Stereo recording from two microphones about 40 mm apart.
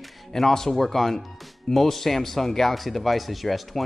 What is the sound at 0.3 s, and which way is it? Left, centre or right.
Speech, centre.